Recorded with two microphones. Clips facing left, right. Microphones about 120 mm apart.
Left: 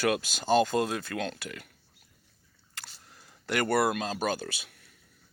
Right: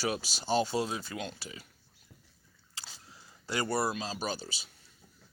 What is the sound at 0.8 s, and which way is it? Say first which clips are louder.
Speech: left 5 dB; 70° left (ahead or behind).